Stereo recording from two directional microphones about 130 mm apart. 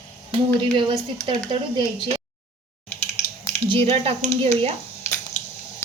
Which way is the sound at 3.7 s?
50° right (ahead or behind).